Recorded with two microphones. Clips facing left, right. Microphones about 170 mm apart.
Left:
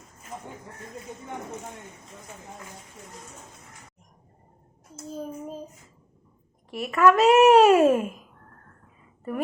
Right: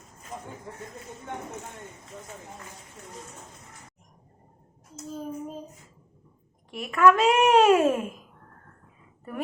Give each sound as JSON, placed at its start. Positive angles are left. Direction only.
{"t": 6.7, "sound": "a child's voice", "side_deg": 0}